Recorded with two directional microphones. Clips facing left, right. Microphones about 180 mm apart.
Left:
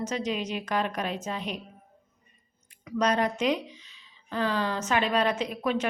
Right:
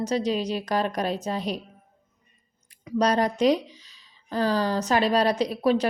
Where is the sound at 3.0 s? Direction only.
35° right (ahead or behind).